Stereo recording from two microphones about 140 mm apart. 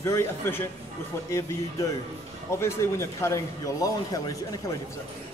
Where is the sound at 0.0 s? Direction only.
20° left (ahead or behind).